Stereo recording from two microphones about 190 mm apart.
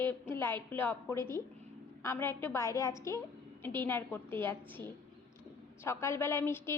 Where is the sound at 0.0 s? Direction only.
10° left (ahead or behind).